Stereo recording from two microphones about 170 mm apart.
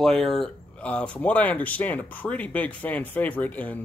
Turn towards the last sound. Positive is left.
turn(degrees=10)  # may be behind; listen again after turning